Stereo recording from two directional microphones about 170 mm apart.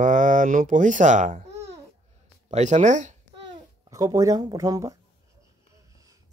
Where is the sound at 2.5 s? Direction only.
45° right (ahead or behind).